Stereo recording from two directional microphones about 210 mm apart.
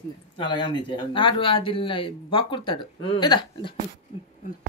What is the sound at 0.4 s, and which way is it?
Speech, 20° left (ahead or behind).